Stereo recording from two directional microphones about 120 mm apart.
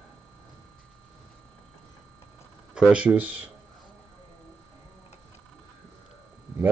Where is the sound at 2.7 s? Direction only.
10° right (ahead or behind).